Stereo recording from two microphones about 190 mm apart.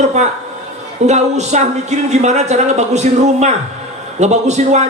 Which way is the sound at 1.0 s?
35° right (ahead or behind).